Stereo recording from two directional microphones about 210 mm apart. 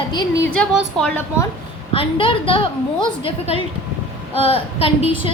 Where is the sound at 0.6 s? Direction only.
5° left (ahead or behind).